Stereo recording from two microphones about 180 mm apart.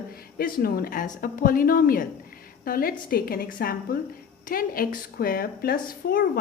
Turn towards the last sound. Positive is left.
turn(degrees=55)  # may be behind; listen again after turning